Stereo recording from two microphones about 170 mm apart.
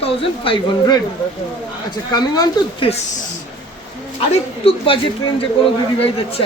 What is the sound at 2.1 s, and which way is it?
Speech, 25° left (ahead or behind).